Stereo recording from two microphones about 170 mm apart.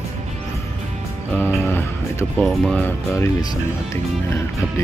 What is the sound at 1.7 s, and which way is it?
Speech, 15° left (ahead or behind).